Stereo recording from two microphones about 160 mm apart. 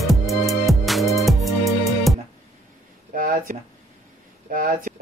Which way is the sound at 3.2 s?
60° right (ahead or behind).